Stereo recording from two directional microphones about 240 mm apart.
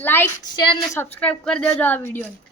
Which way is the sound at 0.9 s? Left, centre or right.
Centre.